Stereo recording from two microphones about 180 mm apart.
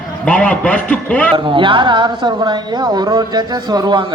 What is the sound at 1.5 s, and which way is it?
A woman's voice, 25° right (ahead or behind).